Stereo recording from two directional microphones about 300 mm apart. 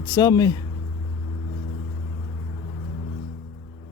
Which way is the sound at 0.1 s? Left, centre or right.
Centre.